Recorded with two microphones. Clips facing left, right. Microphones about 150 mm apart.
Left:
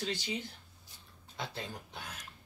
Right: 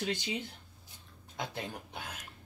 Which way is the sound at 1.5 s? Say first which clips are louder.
Right 2 dB; 20° right (ahead or behind).